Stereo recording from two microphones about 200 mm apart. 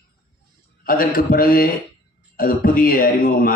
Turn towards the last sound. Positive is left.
turn(degrees=45)  # may be behind; listen again after turning